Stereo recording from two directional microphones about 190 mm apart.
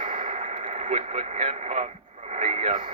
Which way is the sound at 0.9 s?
35° right (ahead or behind).